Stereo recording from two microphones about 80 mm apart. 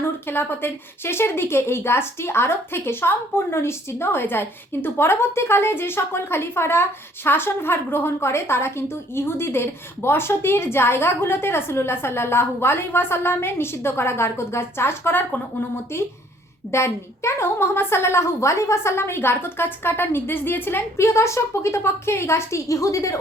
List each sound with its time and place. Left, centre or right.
0.0 s a woman's voice: left